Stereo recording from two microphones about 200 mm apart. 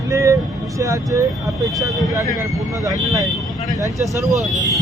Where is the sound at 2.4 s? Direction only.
15° right (ahead or behind).